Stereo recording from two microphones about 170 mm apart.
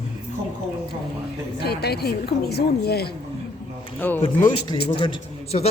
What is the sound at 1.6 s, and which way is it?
A woman's voice, 70° left (ahead or behind).